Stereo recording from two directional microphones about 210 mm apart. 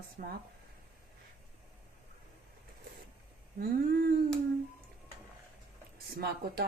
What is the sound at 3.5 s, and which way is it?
Humming, 45° right (ahead or behind).